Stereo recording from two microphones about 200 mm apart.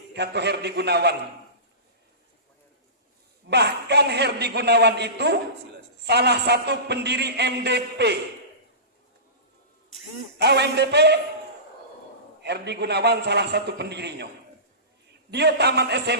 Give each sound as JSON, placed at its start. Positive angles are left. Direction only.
{"t": 0.1, "sound": "a man's voice", "side_deg": -55}
{"t": 3.5, "sound": "a man's voice", "side_deg": -55}
{"t": 10.3, "sound": "a man's voice", "side_deg": -55}
{"t": 12.4, "sound": "a man's voice", "side_deg": -55}
{"t": 15.3, "sound": "a man's voice", "side_deg": -55}